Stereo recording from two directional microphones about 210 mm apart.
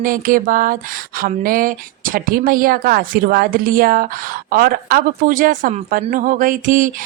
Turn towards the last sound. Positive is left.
turn(degrees=-40)  # may be behind; listen again after turning